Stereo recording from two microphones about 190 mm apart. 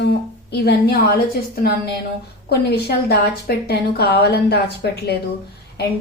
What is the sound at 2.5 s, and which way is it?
Speech, 60° left (ahead or behind).